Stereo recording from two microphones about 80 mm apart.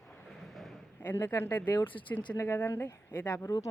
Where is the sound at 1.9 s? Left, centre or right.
Left.